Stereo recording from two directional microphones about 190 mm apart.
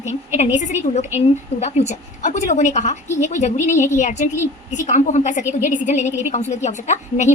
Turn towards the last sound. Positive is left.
turn(degrees=40)  # may be behind; listen again after turning